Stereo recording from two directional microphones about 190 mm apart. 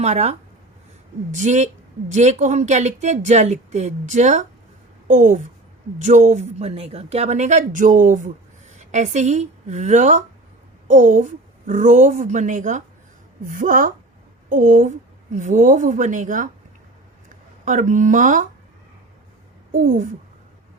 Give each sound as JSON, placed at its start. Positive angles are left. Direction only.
{"t": 0.0, "sound": "a woman's voice", "side_deg": -35}
{"t": 17.7, "sound": "speech", "side_deg": -40}
{"t": 19.7, "sound": "speech", "side_deg": -45}